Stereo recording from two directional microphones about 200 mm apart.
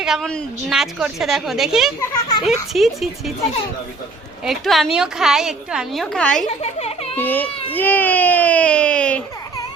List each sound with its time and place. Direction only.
0.0 s a woman's voice: centre (ahead or behind)
2.0 s a child's voice: 15° left (ahead or behind)
2.4 s a woman's voice: centre (ahead or behind)
4.4 s a woman's voice: centre (ahead or behind)
6.6 s a child's voice: 30° left (ahead or behind)
7.2 s a child's voice: 10° left (ahead or behind)